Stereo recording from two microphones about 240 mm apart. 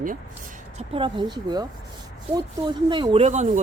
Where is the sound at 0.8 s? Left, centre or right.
Right.